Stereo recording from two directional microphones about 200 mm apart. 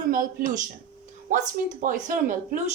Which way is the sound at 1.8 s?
40° right (ahead or behind).